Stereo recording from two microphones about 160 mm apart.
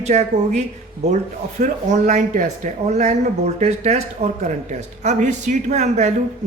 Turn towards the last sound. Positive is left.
turn(degrees=-45)  # may be behind; listen again after turning